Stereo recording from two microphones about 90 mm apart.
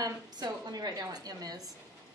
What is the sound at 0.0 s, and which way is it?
A woman's voice, 50° right (ahead or behind).